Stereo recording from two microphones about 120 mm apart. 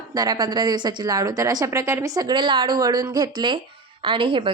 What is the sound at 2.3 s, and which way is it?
A woman's voice, 40° right (ahead or behind).